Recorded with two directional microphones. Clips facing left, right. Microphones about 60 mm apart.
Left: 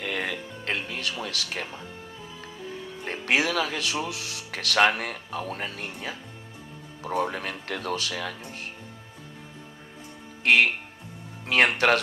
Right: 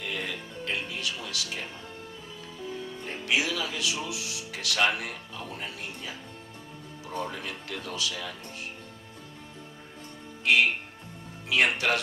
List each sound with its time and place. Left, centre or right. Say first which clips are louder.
0.0 s music: left 4 dB; left
3.0 s speech: left 4 dB; left
10.4 s music: left 3 dB; left
11.4 s speech: left 4 dB; left